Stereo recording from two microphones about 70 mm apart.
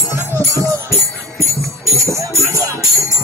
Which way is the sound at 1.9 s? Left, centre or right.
Left.